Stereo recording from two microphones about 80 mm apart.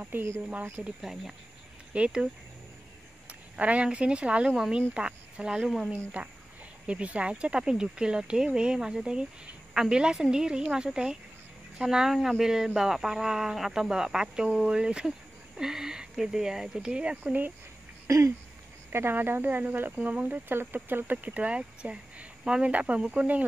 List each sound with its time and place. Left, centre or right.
0.0 s speech: right
2.0 s speech: centre
3.3 s speech: centre
18.0 s a sound: right
18.9 s speech: right